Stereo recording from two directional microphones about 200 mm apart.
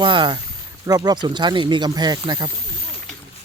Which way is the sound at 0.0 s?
25° right (ahead or behind).